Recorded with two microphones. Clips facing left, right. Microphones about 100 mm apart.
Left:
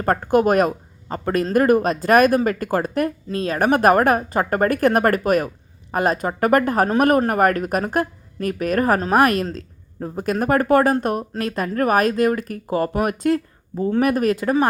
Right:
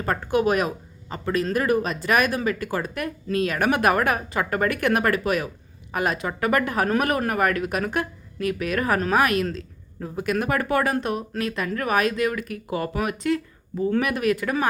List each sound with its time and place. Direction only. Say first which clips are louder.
0.0 s speech: left 5 dB; 45° left (ahead or behind)